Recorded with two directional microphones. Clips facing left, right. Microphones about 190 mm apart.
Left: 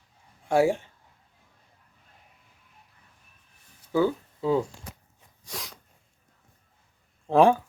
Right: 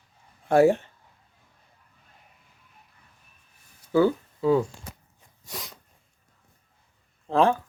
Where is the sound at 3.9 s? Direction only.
20° left (ahead or behind).